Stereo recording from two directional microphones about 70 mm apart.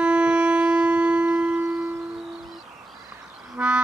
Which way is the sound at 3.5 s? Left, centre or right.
Centre.